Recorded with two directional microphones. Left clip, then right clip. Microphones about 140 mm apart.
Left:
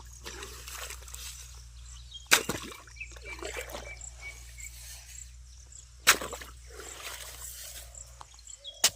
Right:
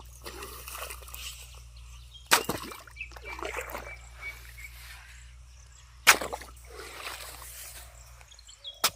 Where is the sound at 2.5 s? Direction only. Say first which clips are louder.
Right 2 dB; 20° right (ahead or behind).